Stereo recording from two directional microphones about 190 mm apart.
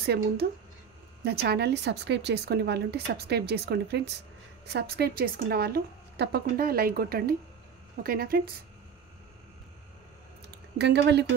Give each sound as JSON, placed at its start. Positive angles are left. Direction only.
{"t": 0.0, "sound": "a woman's voice", "side_deg": -55}
{"t": 10.8, "sound": "speech", "side_deg": -65}